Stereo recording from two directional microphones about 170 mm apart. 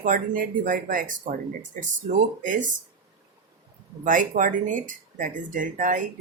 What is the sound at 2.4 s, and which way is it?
Speech, 50° right (ahead or behind).